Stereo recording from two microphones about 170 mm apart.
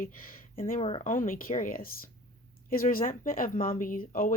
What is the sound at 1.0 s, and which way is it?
Speech, 50° left (ahead or behind).